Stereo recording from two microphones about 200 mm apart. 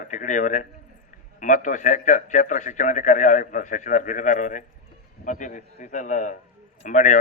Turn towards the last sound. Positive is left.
turn(degrees=40)  # may be behind; listen again after turning